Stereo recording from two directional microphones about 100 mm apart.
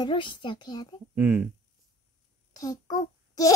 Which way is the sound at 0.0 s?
55° left (ahead or behind).